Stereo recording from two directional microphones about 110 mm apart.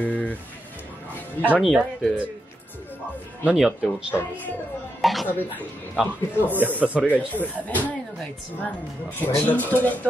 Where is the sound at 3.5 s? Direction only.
5° right (ahead or behind).